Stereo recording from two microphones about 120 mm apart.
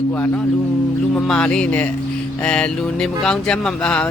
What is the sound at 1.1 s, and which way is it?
Speech, 5° left (ahead or behind).